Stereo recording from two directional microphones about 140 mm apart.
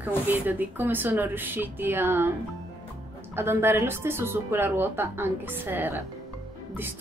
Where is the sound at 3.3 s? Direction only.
15° right (ahead or behind).